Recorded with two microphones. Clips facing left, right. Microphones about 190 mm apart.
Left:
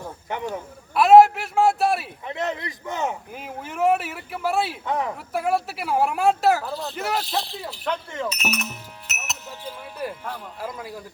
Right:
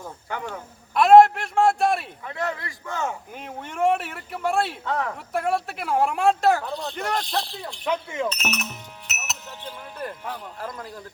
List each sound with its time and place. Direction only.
0.3 s speech: 20° left (ahead or behind)
0.9 s a sound: 5° left (ahead or behind)
2.2 s speech: 20° left (ahead or behind)
3.3 s speech: 5° left (ahead or behind)
4.9 s speech: 15° left (ahead or behind)
5.1 s speech: 5° left (ahead or behind)
7.9 s speech: 10° right (ahead or behind)
8.3 s music: 5° left (ahead or behind)
10.3 s speech: 10° left (ahead or behind)